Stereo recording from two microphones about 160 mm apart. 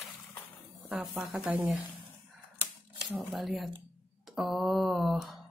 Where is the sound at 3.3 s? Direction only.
Centre (ahead or behind).